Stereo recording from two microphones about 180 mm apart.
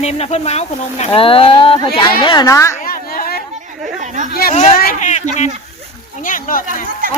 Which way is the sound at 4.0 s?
45° right (ahead or behind).